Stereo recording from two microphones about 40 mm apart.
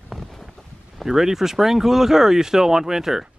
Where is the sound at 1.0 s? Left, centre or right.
Centre.